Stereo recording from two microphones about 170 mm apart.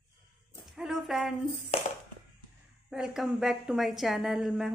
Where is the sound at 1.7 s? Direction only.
35° left (ahead or behind).